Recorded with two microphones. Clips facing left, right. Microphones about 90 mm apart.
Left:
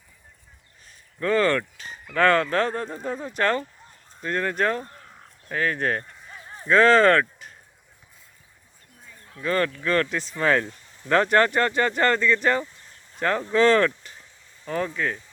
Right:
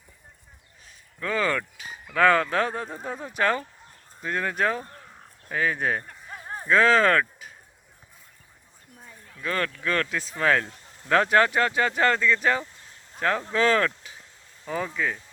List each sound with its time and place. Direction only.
0.9 s speech: centre (ahead or behind)
6.1 s a sound: 50° right (ahead or behind)
6.7 s speech: centre (ahead or behind)
9.1 s speech: centre (ahead or behind)